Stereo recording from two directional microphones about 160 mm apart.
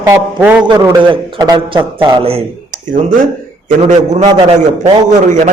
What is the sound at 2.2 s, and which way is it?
Speech, 40° right (ahead or behind).